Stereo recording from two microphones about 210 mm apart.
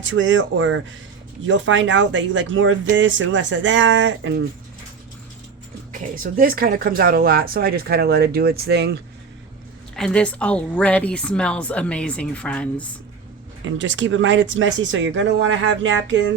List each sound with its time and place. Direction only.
0.0 s speech: 65° right (ahead or behind)
5.9 s speech: 40° right (ahead or behind)
9.9 s a woman's voice: 5° left (ahead or behind)
13.7 s speech: 60° right (ahead or behind)